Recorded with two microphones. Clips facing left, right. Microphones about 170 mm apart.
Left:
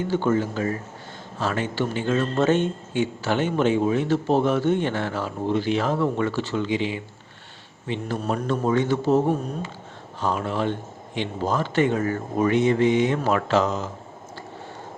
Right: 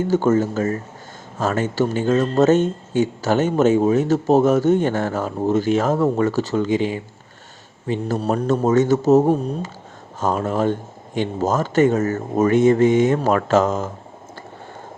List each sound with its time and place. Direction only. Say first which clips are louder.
0.1 s speech: right 5 dB; 45° right (ahead or behind)